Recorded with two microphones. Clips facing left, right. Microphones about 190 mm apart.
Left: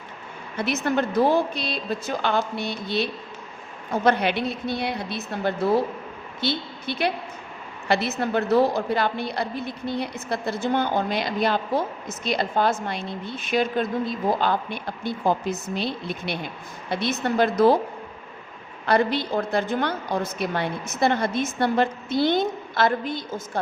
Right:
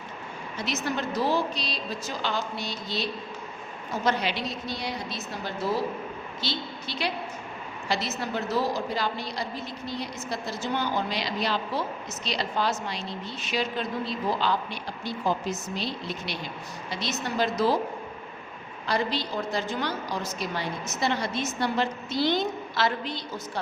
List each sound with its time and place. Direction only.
0.5 s a woman's voice: 55° left (ahead or behind)
18.9 s a woman's voice: 55° left (ahead or behind)